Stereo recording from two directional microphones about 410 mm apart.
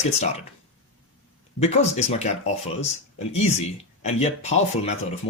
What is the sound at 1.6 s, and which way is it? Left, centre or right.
Speech, centre.